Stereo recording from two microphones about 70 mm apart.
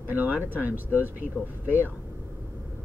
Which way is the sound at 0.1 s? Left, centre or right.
Right.